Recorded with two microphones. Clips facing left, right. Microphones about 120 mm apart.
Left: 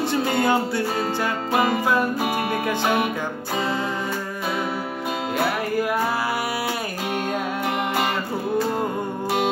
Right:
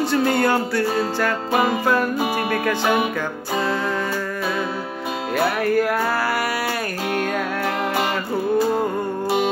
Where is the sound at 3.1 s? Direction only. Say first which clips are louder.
Right 2 dB; 20° left (ahead or behind).